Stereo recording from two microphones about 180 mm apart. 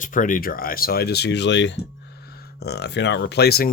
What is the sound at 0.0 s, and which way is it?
Speech, 45° left (ahead or behind).